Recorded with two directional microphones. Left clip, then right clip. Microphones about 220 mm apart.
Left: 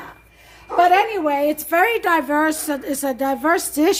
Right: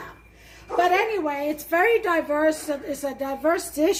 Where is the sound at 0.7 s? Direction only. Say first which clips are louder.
Left 6 dB; 45° left (ahead or behind).